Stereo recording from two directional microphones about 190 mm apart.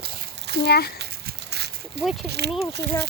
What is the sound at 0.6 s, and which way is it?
Speech, 55° left (ahead or behind).